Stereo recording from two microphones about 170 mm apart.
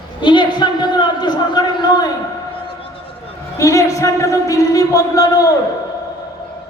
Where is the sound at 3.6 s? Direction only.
20° left (ahead or behind).